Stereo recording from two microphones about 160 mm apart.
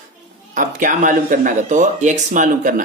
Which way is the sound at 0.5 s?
55° right (ahead or behind).